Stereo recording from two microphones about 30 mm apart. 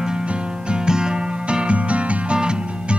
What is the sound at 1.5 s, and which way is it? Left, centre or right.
Music, right.